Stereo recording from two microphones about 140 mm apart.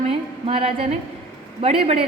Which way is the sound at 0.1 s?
45° right (ahead or behind).